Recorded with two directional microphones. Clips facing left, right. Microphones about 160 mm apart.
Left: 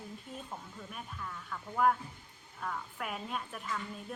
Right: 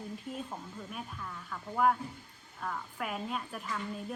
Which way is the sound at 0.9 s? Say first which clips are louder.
Left 1 dB; centre (ahead or behind).